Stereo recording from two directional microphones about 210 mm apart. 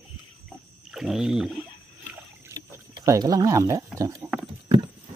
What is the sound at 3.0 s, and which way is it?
Speech, 15° right (ahead or behind).